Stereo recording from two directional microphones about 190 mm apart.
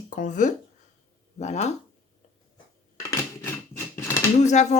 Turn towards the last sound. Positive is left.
turn(degrees=40)  # may be behind; listen again after turning